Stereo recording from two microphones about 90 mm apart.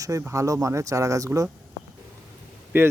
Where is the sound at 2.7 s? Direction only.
25° right (ahead or behind).